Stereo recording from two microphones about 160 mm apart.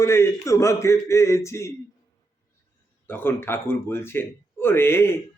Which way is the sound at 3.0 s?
15° left (ahead or behind).